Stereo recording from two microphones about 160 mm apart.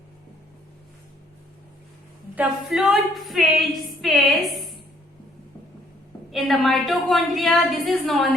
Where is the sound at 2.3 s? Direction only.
5° right (ahead or behind).